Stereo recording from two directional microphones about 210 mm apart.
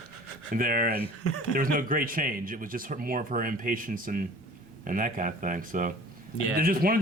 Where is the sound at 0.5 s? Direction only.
40° right (ahead or behind).